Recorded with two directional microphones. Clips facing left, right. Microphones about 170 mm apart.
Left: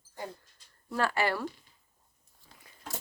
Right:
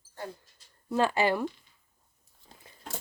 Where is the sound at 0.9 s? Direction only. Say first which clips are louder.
Right 4 dB; 20° right (ahead or behind).